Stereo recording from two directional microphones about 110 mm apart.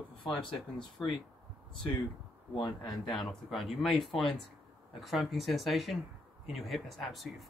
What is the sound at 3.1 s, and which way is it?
Speech, centre (ahead or behind).